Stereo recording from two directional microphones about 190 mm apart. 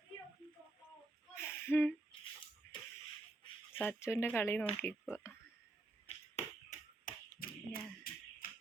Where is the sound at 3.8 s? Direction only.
10° left (ahead or behind).